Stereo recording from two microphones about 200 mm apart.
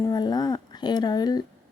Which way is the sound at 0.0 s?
20° left (ahead or behind).